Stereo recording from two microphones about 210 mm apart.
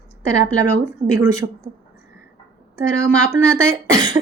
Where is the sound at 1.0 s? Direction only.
15° right (ahead or behind).